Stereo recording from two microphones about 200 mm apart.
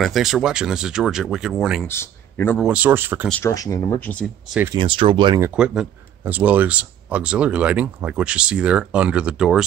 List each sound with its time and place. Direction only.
0.0 s speech: centre (ahead or behind)
1.9 s speech: 10° left (ahead or behind)
2.6 s speech: 5° right (ahead or behind)
3.3 s speech: 5° left (ahead or behind)
4.7 s speech: 25° right (ahead or behind)
5.4 s speech: 5° right (ahead or behind)